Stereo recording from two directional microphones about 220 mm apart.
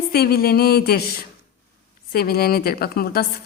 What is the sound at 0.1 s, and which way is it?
A woman's voice, 45° left (ahead or behind).